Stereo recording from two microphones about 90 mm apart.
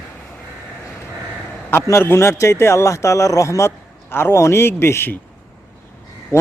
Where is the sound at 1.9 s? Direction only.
30° left (ahead or behind).